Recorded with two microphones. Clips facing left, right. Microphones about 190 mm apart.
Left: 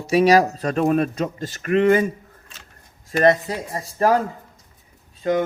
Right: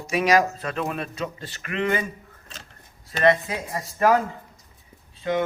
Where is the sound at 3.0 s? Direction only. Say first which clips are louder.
Left 3 dB; 40° left (ahead or behind).